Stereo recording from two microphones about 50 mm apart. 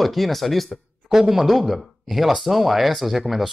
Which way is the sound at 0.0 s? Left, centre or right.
Centre.